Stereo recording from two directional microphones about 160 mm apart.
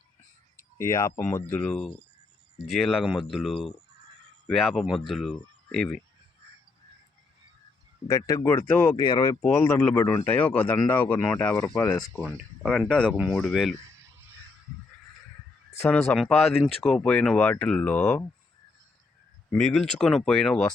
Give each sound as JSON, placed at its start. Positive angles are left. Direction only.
{"t": 0.8, "sound": "speech", "side_deg": 15}
{"t": 8.0, "sound": "speech", "side_deg": 20}
{"t": 9.4, "sound": "speech", "side_deg": 10}
{"t": 15.8, "sound": "speech", "side_deg": 5}
{"t": 19.5, "sound": "speech", "side_deg": 5}